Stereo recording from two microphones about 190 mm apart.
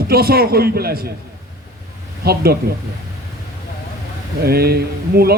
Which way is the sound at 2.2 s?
55° right (ahead or behind).